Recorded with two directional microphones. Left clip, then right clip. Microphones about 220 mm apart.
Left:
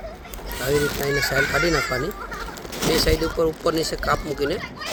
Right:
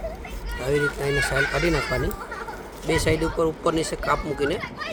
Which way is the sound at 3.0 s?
5° left (ahead or behind).